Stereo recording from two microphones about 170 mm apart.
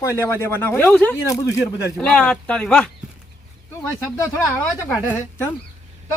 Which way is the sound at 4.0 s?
15° left (ahead or behind).